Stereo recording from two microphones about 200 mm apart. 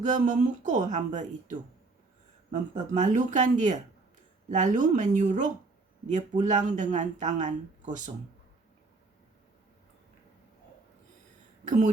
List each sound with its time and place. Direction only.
0.0 s speech: 40° right (ahead or behind)